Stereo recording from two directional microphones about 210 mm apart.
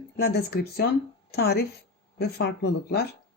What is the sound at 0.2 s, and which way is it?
Speech, 50° left (ahead or behind).